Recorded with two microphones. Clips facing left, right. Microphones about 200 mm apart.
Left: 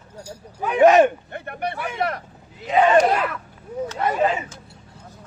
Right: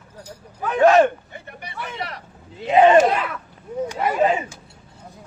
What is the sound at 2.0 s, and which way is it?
Speech, 50° left (ahead or behind).